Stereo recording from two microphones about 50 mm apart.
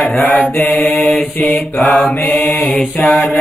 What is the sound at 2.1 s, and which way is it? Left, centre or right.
Mantra, left.